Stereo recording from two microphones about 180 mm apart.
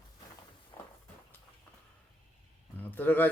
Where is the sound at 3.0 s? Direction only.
10° left (ahead or behind).